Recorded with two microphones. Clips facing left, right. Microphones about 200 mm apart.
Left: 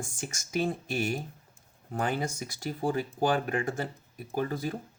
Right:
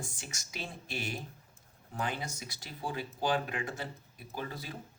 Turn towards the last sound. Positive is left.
turn(degrees=50)  # may be behind; listen again after turning